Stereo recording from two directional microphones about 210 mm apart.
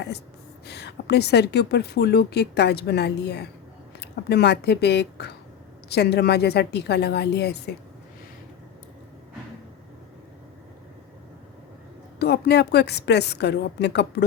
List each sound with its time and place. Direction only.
0.7 s a woman's voice: 50° left (ahead or behind)
12.2 s a woman's voice: 50° left (ahead or behind)